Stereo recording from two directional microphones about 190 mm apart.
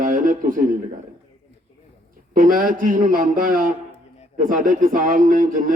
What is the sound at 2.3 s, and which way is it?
Speech, 45° right (ahead or behind).